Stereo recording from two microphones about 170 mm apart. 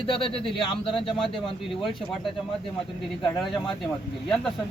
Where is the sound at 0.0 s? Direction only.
30° left (ahead or behind).